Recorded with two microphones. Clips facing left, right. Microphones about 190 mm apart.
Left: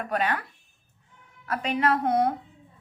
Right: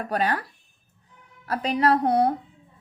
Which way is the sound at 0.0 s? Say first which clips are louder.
Right 2 dB; 35° right (ahead or behind).